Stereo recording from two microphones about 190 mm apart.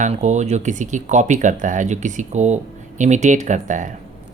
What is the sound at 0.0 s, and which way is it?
Speech, 40° right (ahead or behind).